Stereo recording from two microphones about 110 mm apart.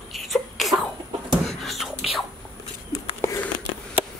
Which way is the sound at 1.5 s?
Centre (ahead or behind).